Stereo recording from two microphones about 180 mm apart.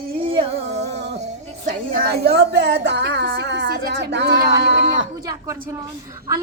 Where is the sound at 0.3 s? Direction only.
35° right (ahead or behind).